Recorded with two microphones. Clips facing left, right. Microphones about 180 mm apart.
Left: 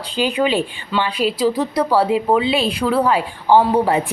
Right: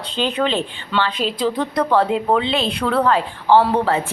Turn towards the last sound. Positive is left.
turn(degrees=15)  # may be behind; listen again after turning